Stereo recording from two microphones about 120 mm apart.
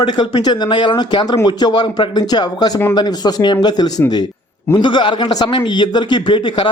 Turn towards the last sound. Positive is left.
turn(degrees=40)  # may be behind; listen again after turning